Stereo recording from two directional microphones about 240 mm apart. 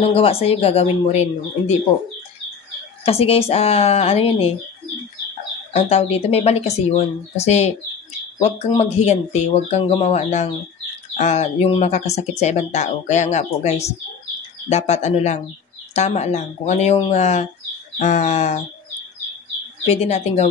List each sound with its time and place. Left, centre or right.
0.1 s speech: left
3.1 s speech: left
5.7 s speech: left
19.9 s speech: left